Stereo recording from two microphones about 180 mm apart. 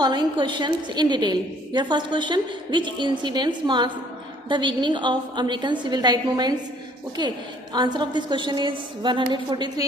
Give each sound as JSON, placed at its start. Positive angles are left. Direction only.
{"t": 0.0, "sound": "a woman's voice", "side_deg": -25}